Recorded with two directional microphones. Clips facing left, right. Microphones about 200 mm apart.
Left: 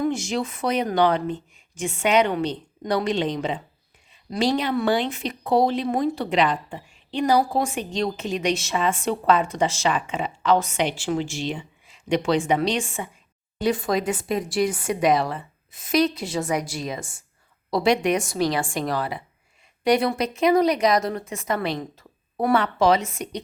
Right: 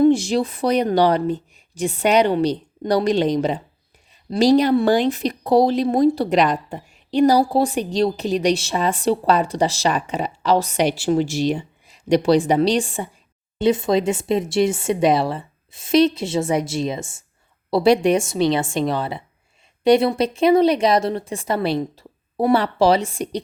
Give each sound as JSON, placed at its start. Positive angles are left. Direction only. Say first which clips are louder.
{"t": 0.0, "sound": "a woman's voice", "louder": "right 9 dB", "side_deg": -35}
{"t": 13.6, "sound": "speech", "louder": "right 5 dB", "side_deg": -25}